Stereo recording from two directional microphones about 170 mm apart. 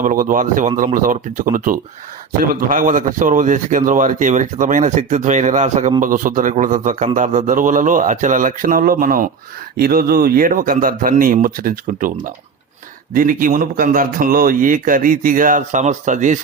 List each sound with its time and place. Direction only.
0.0 s a man's voice: 50° right (ahead or behind)